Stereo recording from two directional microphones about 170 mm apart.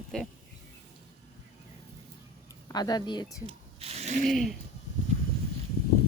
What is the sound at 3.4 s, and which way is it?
Ratchet, 35° right (ahead or behind).